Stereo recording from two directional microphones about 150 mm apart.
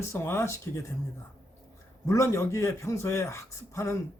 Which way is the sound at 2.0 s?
20° left (ahead or behind).